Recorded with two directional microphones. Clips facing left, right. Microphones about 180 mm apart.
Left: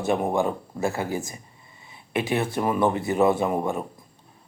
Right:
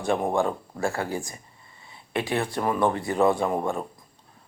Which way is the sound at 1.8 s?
20° left (ahead or behind).